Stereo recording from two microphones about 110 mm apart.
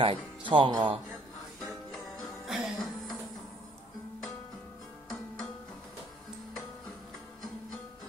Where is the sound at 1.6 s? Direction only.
5° left (ahead or behind).